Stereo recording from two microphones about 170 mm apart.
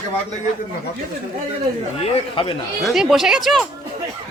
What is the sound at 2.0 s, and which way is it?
Speech, 30° left (ahead or behind).